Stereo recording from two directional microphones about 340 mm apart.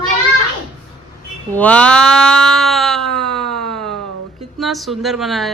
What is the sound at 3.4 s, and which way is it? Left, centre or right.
Siren, right.